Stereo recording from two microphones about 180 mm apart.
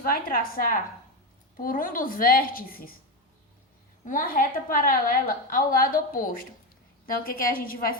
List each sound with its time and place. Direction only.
0.0 s a woman's voice: 55° left (ahead or behind)
4.0 s a woman's voice: 50° left (ahead or behind)
7.5 s a woman's voice: 55° left (ahead or behind)